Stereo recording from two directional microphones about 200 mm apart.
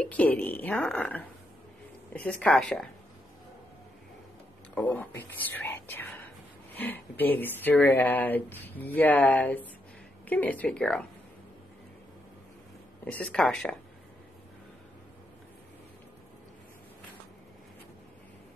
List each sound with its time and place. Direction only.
0.0 s speech: 5° left (ahead or behind)
2.2 s speech: 5° left (ahead or behind)
4.7 s speech: 10° left (ahead or behind)
13.0 s speech: 5° left (ahead or behind)